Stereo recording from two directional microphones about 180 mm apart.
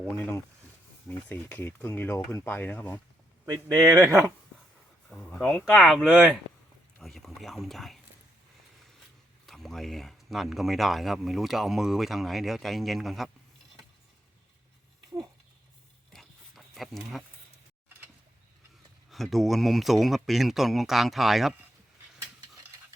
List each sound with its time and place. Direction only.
0.2 s speech: 15° left (ahead or behind)
3.8 s speech: 15° right (ahead or behind)
5.0 s speech: 5° left (ahead or behind)
7.0 s a sound: centre (ahead or behind)
9.5 s speech: centre (ahead or behind)
16.1 s a sound: centre (ahead or behind)
19.1 s speech: centre (ahead or behind)